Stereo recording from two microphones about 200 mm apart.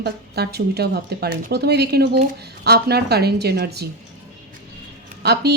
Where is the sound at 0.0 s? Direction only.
55° right (ahead or behind).